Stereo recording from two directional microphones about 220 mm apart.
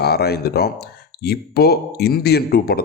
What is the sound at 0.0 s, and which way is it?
Speech, 45° left (ahead or behind).